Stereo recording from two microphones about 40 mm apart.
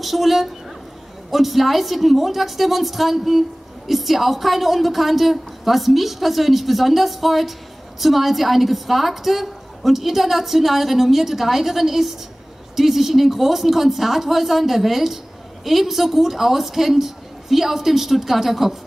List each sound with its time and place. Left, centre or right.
0.0 s a woman's voice: centre